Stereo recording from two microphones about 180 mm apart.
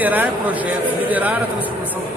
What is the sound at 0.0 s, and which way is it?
Speech, 10° right (ahead or behind).